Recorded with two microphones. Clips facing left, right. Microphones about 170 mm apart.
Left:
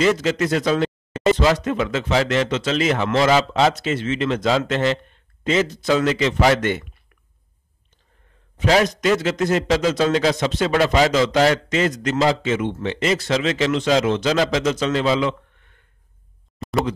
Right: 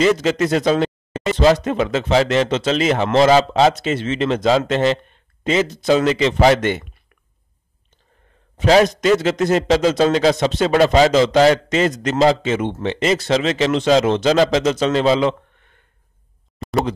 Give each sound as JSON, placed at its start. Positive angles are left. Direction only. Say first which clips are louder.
{"t": 0.0, "sound": "a man's voice", "louder": "right 3 dB", "side_deg": -25}
{"t": 8.5, "sound": "a man's voice", "louder": "right 4 dB", "side_deg": -25}
{"t": 16.5, "sound": "a sound", "louder": "right 2 dB", "side_deg": 0}